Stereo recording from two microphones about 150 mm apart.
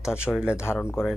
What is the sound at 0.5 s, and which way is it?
Speech, 15° left (ahead or behind).